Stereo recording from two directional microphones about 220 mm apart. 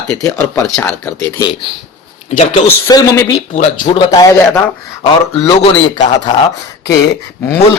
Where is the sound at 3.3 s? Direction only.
30° left (ahead or behind).